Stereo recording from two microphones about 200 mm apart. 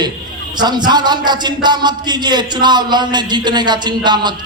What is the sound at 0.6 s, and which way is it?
A man's voice, 20° right (ahead or behind).